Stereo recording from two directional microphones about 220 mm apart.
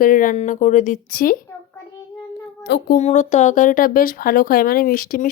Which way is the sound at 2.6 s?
50° left (ahead or behind).